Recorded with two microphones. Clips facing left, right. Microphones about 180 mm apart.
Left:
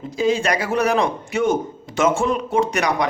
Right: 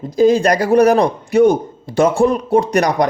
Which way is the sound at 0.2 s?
40° right (ahead or behind).